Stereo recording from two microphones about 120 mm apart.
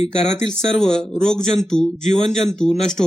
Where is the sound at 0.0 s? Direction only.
65° left (ahead or behind).